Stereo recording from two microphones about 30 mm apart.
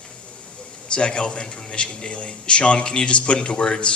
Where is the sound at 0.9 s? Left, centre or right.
Left.